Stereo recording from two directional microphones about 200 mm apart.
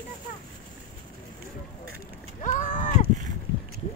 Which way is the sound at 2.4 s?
40° left (ahead or behind).